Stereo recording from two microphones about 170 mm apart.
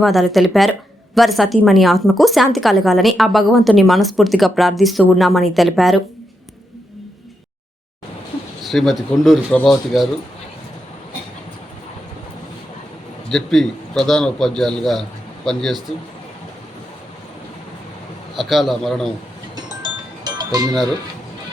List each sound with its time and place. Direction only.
0.0 s a woman's voice: centre (ahead or behind)
8.6 s a woman's voice: centre (ahead or behind)
13.2 s a man's voice: centre (ahead or behind)
18.3 s a woman's voice: centre (ahead or behind)
19.6 s music: 25° right (ahead or behind)